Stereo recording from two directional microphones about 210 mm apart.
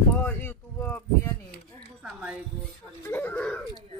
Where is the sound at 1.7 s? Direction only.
5° left (ahead or behind).